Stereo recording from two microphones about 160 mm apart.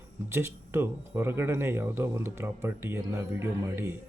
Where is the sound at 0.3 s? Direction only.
15° right (ahead or behind).